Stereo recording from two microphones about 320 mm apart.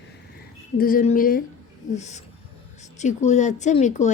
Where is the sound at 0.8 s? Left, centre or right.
Left.